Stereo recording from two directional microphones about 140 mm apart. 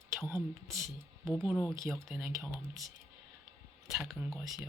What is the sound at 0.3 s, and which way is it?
Speech, 20° right (ahead or behind).